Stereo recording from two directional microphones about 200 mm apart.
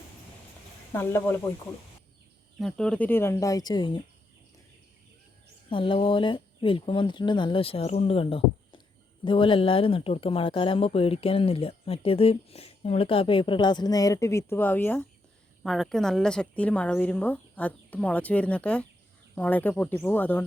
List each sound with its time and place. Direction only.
0.9 s a woman's voice: 10° left (ahead or behind)
2.6 s a woman's voice: 5° left (ahead or behind); by 4.0 s 20° left (ahead or behind)
5.6 s a woman's voice: 25° left (ahead or behind); by 20.4 s 10° left (ahead or behind)